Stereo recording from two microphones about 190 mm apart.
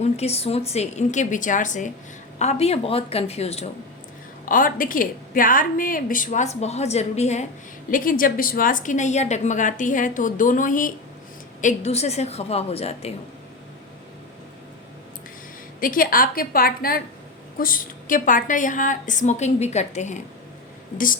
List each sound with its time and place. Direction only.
0.0 s a woman's voice: 35° left (ahead or behind)
4.4 s a woman's voice: 45° left (ahead or behind)
7.9 s a woman's voice: 45° left (ahead or behind)
15.8 s a woman's voice: 45° left (ahead or behind)